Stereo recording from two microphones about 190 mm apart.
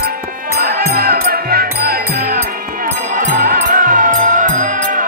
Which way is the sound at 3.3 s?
45° right (ahead or behind).